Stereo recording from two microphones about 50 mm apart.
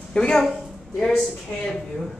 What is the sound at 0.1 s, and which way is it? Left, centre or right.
A woman's voice, centre.